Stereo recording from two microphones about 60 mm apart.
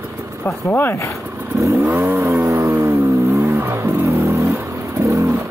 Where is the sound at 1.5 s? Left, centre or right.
Right.